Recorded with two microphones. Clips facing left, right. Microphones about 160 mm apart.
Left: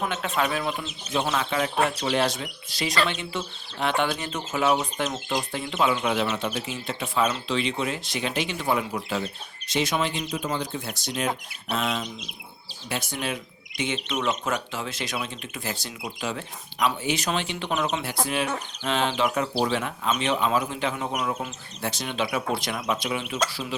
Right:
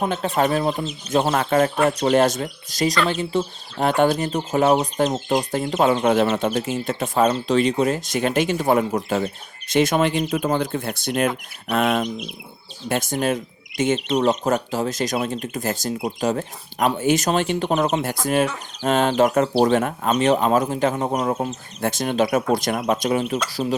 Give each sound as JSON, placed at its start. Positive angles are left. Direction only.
{"t": 0.0, "sound": "speech", "side_deg": -35}
{"t": 12.9, "sound": "speech", "side_deg": -45}
{"t": 21.8, "sound": "speech", "side_deg": -50}